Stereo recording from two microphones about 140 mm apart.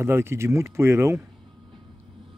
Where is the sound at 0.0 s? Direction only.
20° right (ahead or behind).